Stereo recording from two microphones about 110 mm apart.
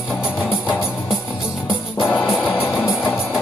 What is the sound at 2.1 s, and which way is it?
Music, 5° left (ahead or behind).